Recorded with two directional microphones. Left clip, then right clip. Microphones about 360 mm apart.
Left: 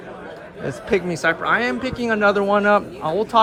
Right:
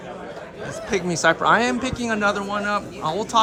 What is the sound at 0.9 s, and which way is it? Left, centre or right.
A man's voice, centre.